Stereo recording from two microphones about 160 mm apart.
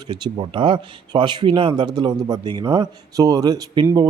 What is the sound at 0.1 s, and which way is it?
Speech, 30° right (ahead or behind).